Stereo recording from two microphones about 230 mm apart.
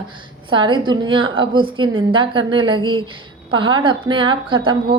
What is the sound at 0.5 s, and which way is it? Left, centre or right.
A woman's voice, right.